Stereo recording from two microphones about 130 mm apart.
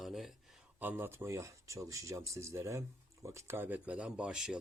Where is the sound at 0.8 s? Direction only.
15° right (ahead or behind).